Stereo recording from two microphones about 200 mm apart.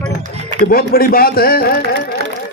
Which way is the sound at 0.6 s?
45° left (ahead or behind).